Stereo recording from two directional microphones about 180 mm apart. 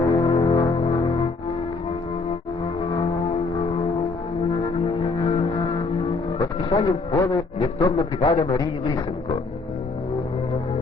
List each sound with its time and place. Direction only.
0.1 s music: 25° left (ahead or behind)
4.9 s music: 30° left (ahead or behind)
6.0 s a man's voice: 25° left (ahead or behind)